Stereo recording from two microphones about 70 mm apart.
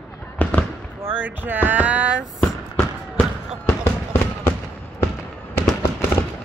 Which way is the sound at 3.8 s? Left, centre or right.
Left.